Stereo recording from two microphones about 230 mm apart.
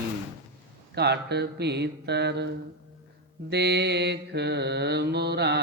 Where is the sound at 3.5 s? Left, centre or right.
Right.